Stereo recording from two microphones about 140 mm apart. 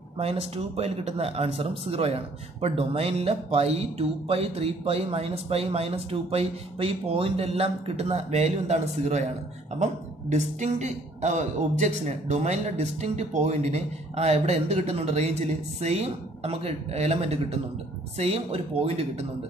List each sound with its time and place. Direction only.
0.2 s a man's voice: 50° right (ahead or behind)
10.3 s a man's voice: 55° right (ahead or behind)